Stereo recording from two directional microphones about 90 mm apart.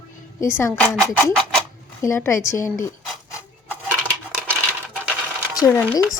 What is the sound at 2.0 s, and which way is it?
Speech, 30° left (ahead or behind).